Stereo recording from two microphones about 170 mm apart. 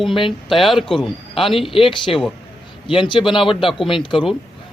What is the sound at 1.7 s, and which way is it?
Speech, 30° left (ahead or behind).